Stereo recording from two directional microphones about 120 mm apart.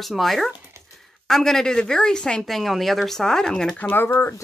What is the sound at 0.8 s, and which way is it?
Speech, centre (ahead or behind).